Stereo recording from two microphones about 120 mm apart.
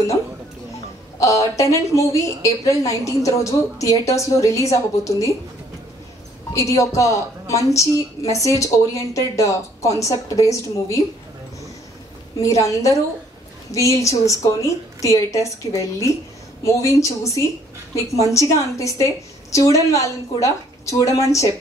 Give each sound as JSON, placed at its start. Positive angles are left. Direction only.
{"t": 1.2, "sound": "a woman's voice", "side_deg": 25}
{"t": 6.5, "sound": "a woman's voice", "side_deg": 25}
{"t": 12.4, "sound": "a woman's voice", "side_deg": 25}